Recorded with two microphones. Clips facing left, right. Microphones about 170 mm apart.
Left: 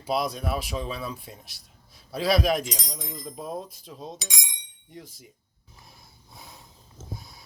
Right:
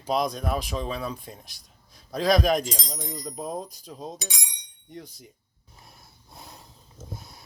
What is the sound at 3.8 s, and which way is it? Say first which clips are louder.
Speech: right 2 dB; centre (ahead or behind).